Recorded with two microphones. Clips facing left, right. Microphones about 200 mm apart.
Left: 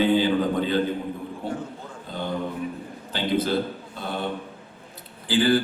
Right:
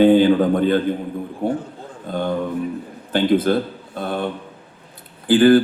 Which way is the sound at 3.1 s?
50° right (ahead or behind).